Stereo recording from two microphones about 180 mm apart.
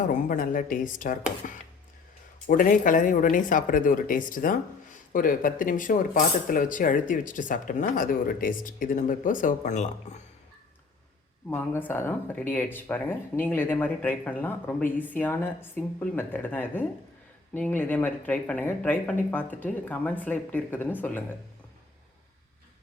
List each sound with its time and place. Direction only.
0.0 s speech: 45° left (ahead or behind)
11.5 s speech: 10° left (ahead or behind)